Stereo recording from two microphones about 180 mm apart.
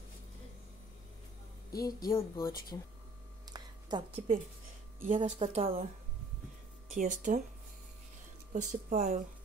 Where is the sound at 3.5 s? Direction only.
30° right (ahead or behind).